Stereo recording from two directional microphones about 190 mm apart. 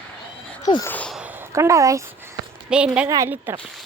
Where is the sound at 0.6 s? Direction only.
20° left (ahead or behind).